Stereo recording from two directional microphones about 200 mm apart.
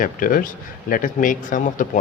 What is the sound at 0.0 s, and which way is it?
Speech, 45° left (ahead or behind).